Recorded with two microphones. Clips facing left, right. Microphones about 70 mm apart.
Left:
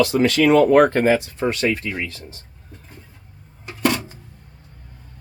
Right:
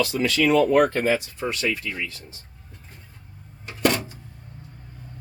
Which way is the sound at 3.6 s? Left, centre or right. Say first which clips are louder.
Left 1 dB; centre.